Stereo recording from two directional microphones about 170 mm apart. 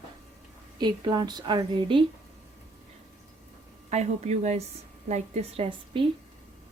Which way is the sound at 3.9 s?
40° right (ahead or behind).